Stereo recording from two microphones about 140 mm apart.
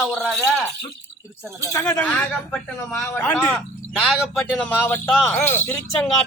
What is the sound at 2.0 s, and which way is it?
Speech, 10° left (ahead or behind).